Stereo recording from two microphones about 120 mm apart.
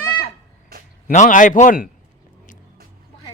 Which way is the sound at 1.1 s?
90° left.